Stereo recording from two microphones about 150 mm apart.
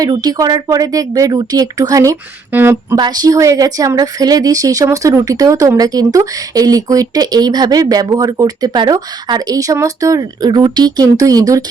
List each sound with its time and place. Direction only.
0.0 s a woman's voice: 25° right (ahead or behind)
3.0 s a woman's voice: 25° right (ahead or behind)